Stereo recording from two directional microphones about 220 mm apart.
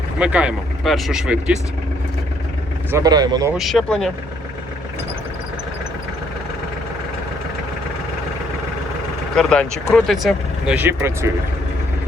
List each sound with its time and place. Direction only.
0.2 s speech: 5° right (ahead or behind)
2.9 s speech: 15° right (ahead or behind)
3.5 s speech: centre (ahead or behind)
9.3 s speech: 5° left (ahead or behind)